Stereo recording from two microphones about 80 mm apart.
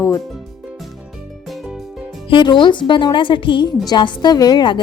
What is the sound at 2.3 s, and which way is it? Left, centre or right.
A woman's voice, left.